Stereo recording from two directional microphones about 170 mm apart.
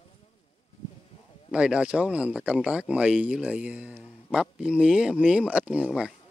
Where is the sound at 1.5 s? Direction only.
5° right (ahead or behind).